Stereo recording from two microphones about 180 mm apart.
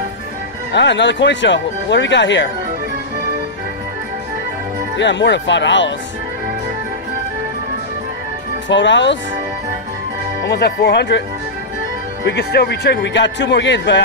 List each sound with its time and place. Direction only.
0.7 s speech: 80° left
4.9 s speech: 85° left
8.6 s speech: 90° left
10.4 s a man's voice: 65° left (ahead or behind)
12.3 s a man's voice: 65° left (ahead or behind)